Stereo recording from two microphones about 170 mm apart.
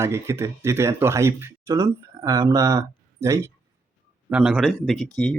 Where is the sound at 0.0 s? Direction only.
15° right (ahead or behind).